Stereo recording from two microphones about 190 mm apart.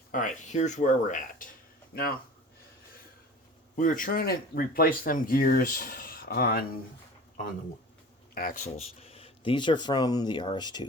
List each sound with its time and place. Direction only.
0.1 s speech: 40° left (ahead or behind)
3.8 s speech: 45° left (ahead or behind)
8.4 s speech: 45° left (ahead or behind)
9.0 s speech: 30° left (ahead or behind)